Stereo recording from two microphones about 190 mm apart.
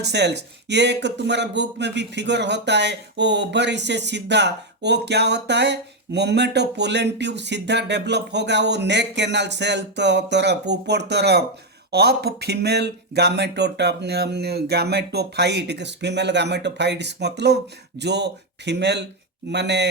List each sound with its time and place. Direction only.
0.0 s speech: 60° right (ahead or behind)